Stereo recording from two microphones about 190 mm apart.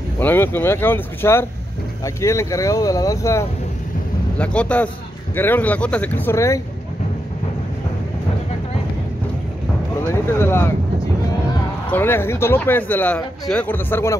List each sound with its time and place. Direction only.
0.2 s speech: 10° left (ahead or behind)
10.0 s speech: 15° left (ahead or behind)
11.9 s speech: 10° left (ahead or behind)